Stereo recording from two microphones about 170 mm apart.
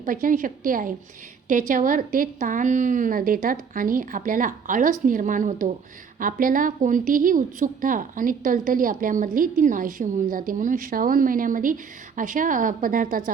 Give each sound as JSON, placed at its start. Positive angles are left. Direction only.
{"t": 0.0, "sound": "a woman's voice", "side_deg": -55}